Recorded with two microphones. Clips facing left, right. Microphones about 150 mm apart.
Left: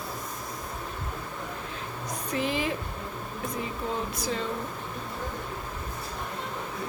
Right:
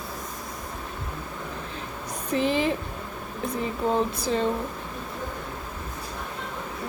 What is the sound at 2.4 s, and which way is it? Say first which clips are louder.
Speech: right 6 dB; 30° right (ahead or behind).